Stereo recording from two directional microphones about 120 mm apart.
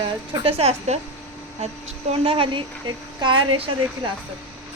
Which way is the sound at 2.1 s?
50° right (ahead or behind).